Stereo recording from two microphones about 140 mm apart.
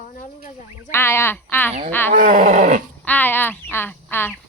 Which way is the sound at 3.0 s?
10° left (ahead or behind).